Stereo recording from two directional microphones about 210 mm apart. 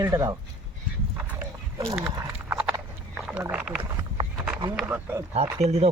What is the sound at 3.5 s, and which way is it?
Speech, 5° right (ahead or behind).